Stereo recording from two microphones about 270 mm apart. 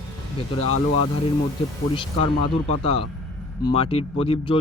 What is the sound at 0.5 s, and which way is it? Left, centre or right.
Speech, left.